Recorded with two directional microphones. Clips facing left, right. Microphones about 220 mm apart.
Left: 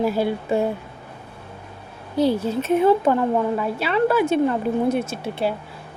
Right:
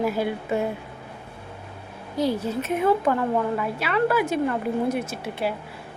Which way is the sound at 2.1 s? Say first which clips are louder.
Left 4 dB; 30° left (ahead or behind).